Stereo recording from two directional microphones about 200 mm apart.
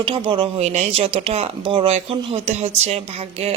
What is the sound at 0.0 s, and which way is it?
Speech, 25° right (ahead or behind).